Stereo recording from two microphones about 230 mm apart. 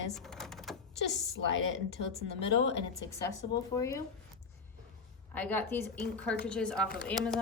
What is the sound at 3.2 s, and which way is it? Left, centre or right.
Speech, centre.